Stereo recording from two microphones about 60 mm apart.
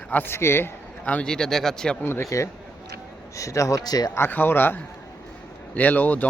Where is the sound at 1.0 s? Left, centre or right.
Left.